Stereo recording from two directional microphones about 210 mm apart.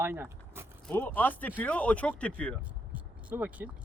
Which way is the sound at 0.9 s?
10° left (ahead or behind).